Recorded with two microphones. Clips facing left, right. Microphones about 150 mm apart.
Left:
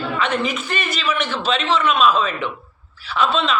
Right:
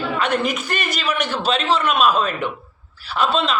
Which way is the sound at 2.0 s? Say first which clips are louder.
Left 1 dB; 45° right (ahead or behind).